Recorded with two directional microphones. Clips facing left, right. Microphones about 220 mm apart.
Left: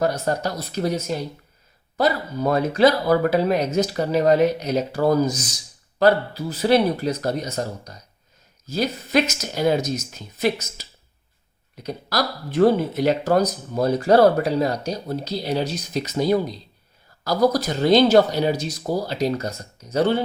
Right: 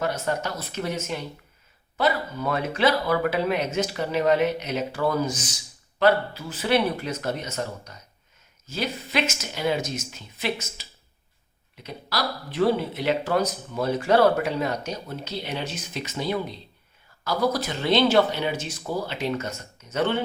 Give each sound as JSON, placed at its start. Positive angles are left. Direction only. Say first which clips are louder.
{"t": 0.0, "sound": "speech", "louder": "left 4 dB", "side_deg": 40}